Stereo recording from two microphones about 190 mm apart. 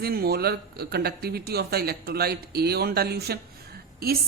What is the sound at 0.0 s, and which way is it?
A woman's voice, 55° right (ahead or behind).